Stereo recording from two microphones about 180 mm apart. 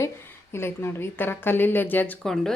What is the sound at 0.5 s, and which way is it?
Speech, 15° left (ahead or behind).